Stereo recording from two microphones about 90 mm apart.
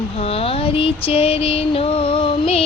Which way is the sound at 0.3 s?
90° left.